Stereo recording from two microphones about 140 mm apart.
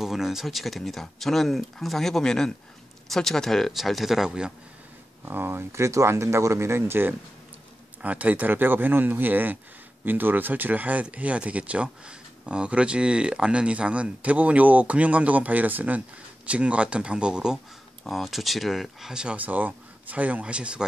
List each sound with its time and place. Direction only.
0.0 s speech: centre (ahead or behind)
5.2 s speech: 15° right (ahead or behind)